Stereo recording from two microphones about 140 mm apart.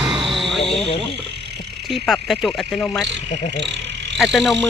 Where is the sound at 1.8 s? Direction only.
Centre (ahead or behind).